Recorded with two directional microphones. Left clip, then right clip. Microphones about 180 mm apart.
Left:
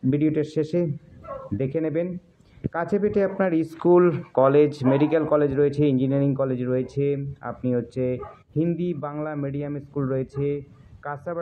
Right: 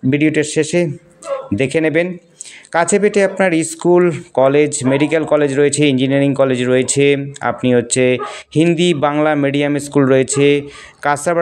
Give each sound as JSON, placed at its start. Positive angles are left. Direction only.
{"t": 0.1, "sound": "speech", "side_deg": -30}